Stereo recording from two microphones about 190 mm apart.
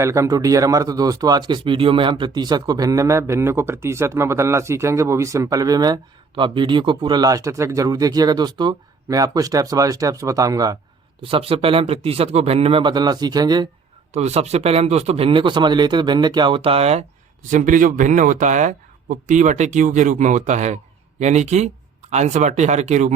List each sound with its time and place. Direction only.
0.0 s speech: 15° right (ahead or behind)
14.1 s speech: 35° right (ahead or behind)